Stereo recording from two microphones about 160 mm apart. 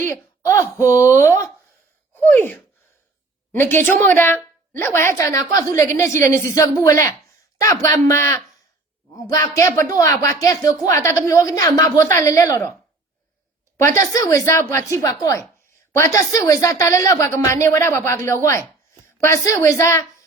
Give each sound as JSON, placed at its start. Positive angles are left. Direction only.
{"t": 0.0, "sound": "a woman's voice", "side_deg": 15}
{"t": 2.1, "sound": "gasp", "side_deg": 10}
{"t": 3.5, "sound": "a woman's voice", "side_deg": 15}
{"t": 13.8, "sound": "a woman's voice", "side_deg": 20}